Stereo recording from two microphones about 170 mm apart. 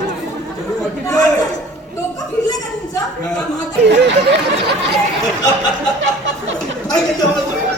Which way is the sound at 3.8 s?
90° right.